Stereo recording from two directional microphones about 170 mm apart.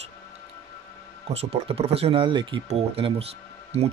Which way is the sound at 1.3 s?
35° right (ahead or behind).